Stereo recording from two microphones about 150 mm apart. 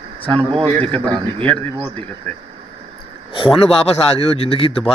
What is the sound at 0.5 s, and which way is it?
Speech, 35° right (ahead or behind).